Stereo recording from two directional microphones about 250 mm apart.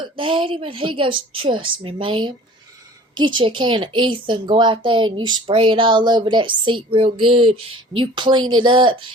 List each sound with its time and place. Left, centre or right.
0.0 s a woman's voice: centre